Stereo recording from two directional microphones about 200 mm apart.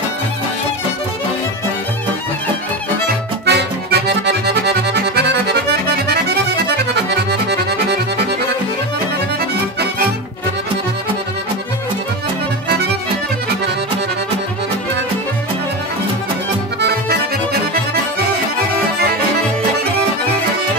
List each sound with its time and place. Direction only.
3.4 s accordion: 55° right (ahead or behind)
7.2 s accordion: 55° right (ahead or behind)
9.4 s accordion: 50° right (ahead or behind)
12.6 s accordion: 50° right (ahead or behind)
16.8 s accordion: 55° right (ahead or behind)